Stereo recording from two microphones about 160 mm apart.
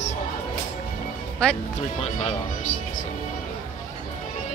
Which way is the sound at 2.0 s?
40° left (ahead or behind).